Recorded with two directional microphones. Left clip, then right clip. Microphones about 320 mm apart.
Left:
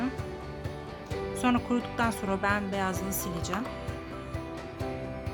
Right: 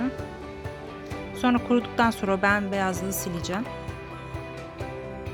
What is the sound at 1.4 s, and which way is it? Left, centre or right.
Music, centre.